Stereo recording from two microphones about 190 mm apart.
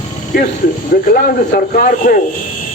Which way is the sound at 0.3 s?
45° left (ahead or behind).